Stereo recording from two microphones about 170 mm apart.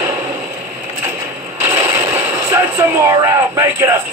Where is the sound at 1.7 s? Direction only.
15° right (ahead or behind).